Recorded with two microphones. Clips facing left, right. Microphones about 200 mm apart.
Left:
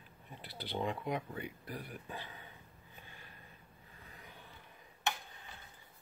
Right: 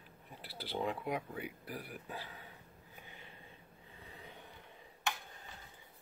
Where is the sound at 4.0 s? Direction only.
30° right (ahead or behind).